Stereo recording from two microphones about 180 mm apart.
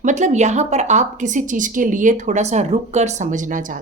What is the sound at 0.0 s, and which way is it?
A woman's voice, 40° right (ahead or behind).